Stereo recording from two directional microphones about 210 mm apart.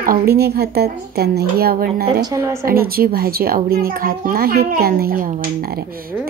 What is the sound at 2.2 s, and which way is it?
Speech, 15° right (ahead or behind).